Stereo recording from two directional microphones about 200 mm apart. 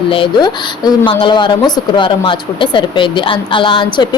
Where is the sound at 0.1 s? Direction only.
25° left (ahead or behind).